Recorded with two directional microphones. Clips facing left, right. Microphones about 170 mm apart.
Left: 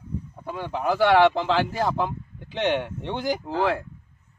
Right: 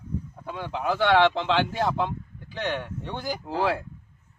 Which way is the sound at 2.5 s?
20° left (ahead or behind).